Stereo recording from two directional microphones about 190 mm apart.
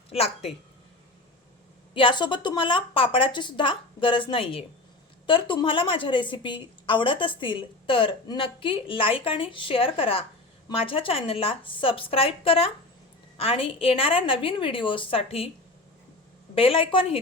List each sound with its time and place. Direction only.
0.1 s a woman's voice: 30° left (ahead or behind)
1.9 s a woman's voice: 25° left (ahead or behind)
16.6 s a woman's voice: 30° left (ahead or behind)